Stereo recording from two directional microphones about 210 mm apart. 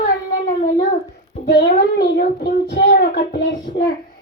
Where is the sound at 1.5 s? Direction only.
50° left (ahead or behind).